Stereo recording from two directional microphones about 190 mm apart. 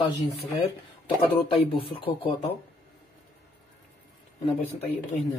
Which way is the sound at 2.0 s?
30° left (ahead or behind).